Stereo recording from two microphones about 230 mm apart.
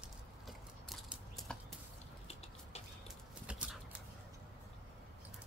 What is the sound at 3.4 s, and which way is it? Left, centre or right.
Dog, centre.